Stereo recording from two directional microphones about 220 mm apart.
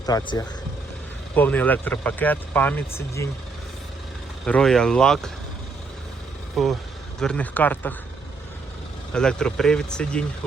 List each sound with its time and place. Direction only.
0.0 s speech: 15° left (ahead or behind)
4.4 s speech: 5° left (ahead or behind)
6.6 s speech: centre (ahead or behind)
9.1 s speech: 5° left (ahead or behind)